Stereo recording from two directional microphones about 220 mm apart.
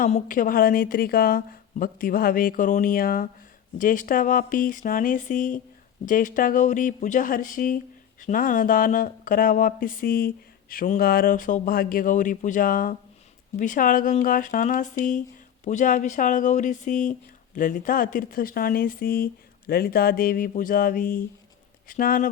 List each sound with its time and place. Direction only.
0.0 s speech: 35° left (ahead or behind)